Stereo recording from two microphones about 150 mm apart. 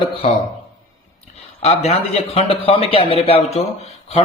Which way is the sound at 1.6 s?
40° left (ahead or behind).